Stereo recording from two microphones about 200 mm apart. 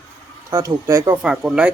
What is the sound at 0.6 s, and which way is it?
Speech, 15° right (ahead or behind).